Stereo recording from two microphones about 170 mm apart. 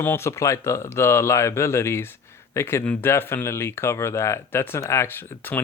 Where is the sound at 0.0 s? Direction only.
15° left (ahead or behind).